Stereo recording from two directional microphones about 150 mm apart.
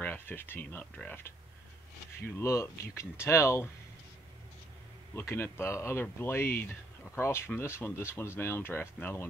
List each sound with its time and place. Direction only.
0.0 s speech: 15° left (ahead or behind)
2.3 s speech: 20° left (ahead or behind)
5.3 s speech: 15° left (ahead or behind)